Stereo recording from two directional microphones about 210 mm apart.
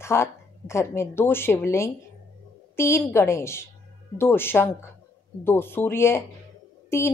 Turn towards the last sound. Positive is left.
turn(degrees=10)  # may be behind; listen again after turning